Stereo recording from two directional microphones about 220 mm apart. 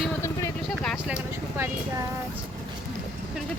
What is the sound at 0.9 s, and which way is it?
Vehicle, 5° right (ahead or behind).